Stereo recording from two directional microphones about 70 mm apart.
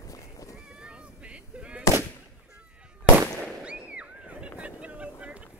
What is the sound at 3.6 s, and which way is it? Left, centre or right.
Boat, centre.